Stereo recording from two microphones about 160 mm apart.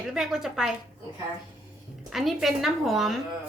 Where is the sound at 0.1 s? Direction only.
5° right (ahead or behind).